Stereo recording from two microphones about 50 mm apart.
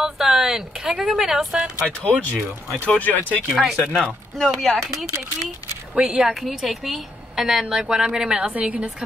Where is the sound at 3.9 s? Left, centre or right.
Centre.